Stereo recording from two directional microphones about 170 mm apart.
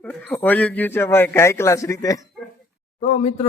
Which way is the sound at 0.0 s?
10° left (ahead or behind).